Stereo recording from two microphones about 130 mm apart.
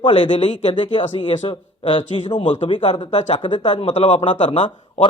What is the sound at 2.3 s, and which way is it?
Speech, 70° left (ahead or behind).